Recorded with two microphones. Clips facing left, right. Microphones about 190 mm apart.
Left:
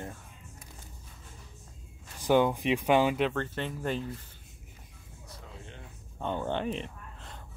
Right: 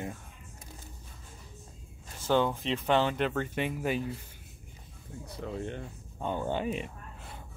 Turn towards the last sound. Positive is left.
turn(degrees=-10)  # may be behind; listen again after turning